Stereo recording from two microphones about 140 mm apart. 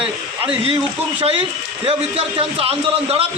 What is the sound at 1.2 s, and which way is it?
A man's voice, 40° right (ahead or behind).